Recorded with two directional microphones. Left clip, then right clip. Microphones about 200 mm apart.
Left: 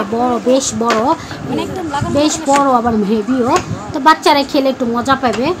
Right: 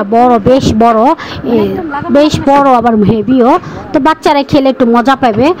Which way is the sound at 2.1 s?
40° right (ahead or behind).